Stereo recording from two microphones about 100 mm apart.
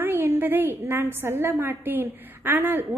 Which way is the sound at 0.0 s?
20° right (ahead or behind).